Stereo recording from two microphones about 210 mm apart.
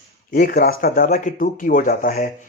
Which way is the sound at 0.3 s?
45° left (ahead or behind).